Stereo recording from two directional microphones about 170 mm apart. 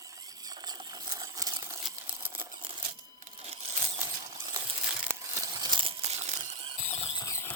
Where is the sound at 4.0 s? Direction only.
15° right (ahead or behind).